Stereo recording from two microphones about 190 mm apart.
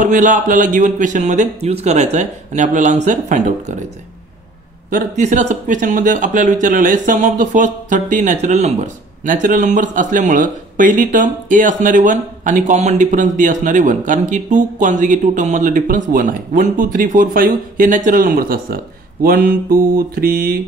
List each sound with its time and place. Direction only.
0.0 s speech: 40° right (ahead or behind)
4.8 s speech: 40° right (ahead or behind)
19.2 s mantra: 50° right (ahead or behind)